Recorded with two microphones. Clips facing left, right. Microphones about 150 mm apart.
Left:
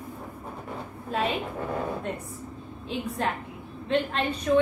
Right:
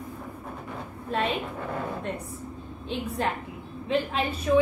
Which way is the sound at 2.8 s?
Centre (ahead or behind).